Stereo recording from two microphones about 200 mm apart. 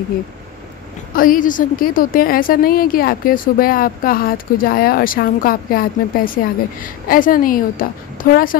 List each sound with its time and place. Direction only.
1.1 s a woman's voice: 45° left (ahead or behind)